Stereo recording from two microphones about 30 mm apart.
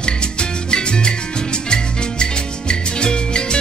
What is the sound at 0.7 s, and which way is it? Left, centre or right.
Salsa music, left.